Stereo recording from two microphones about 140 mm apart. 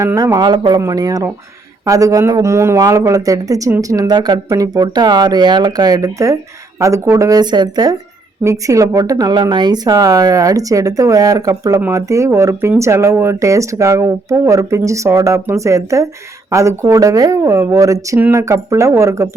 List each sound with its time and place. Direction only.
0.0 s speech: 20° right (ahead or behind)